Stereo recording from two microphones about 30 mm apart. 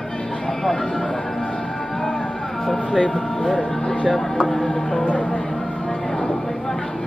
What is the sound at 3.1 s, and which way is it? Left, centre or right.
Music, centre.